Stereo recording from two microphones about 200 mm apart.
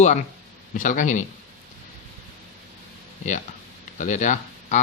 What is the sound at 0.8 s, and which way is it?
Speech, 40° left (ahead or behind).